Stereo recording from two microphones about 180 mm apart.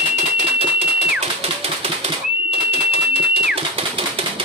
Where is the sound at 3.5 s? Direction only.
30° right (ahead or behind).